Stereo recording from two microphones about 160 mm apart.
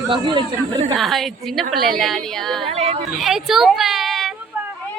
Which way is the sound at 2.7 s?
40° right (ahead or behind).